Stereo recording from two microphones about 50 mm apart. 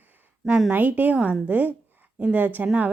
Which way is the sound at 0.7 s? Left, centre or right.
Right.